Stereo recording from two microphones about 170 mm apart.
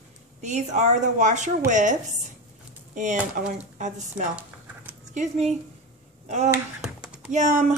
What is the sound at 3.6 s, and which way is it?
A woman's voice, 45° right (ahead or behind).